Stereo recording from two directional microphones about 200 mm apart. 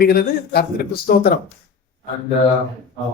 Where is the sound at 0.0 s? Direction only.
50° left (ahead or behind).